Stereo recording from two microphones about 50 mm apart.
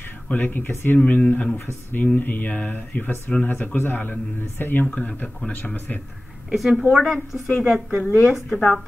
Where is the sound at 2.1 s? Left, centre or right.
Left.